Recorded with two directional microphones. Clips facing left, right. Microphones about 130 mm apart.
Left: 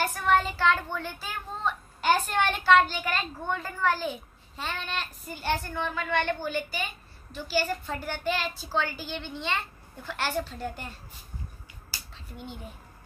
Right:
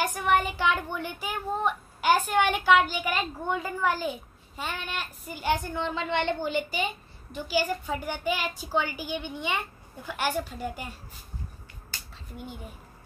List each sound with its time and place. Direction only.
0.0 s a child's voice: 15° right (ahead or behind)
11.9 s finger snapping: 10° left (ahead or behind)